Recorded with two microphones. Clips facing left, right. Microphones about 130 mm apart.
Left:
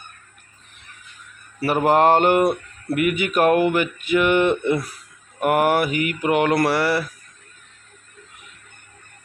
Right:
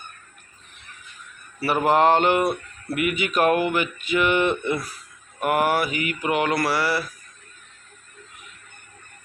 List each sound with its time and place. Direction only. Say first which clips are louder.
1.6 s speech: left 2 dB; 40° left (ahead or behind)
5.4 s mantra: left 3 dB; 55° left (ahead or behind)